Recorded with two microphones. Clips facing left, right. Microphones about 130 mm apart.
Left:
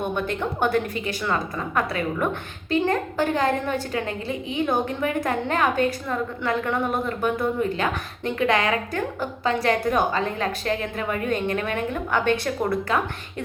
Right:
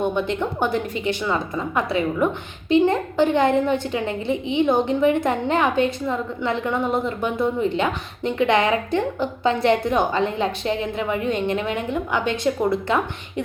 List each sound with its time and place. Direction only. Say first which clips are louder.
0.0 s a woman's voice: right 3 dB; 20° right (ahead or behind)